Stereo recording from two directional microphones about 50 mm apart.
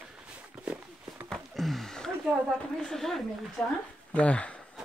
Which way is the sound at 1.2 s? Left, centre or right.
Centre.